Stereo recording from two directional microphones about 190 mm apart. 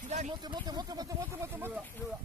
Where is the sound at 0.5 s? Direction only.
20° right (ahead or behind).